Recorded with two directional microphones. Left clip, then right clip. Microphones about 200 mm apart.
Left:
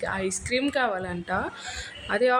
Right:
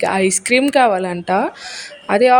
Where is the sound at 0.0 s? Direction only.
40° right (ahead or behind).